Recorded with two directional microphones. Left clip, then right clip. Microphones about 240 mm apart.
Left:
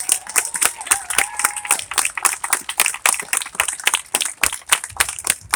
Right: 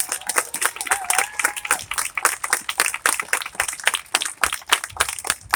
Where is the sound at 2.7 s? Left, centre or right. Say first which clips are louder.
Left 4 dB; left.